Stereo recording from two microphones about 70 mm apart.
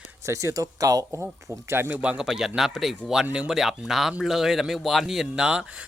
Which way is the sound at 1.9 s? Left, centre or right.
Right.